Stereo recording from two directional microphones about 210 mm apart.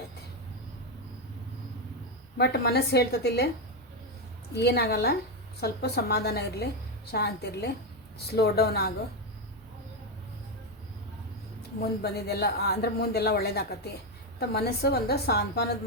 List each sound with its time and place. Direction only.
2.4 s speech: 50° left (ahead or behind)
4.5 s speech: 50° left (ahead or behind)
11.8 s speech: 50° left (ahead or behind)